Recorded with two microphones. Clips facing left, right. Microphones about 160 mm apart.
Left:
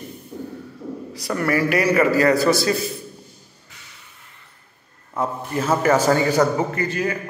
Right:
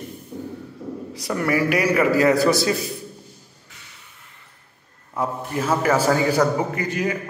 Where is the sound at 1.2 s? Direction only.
10° right (ahead or behind).